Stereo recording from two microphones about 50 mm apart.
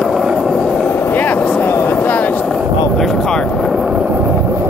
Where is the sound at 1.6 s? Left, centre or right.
Left.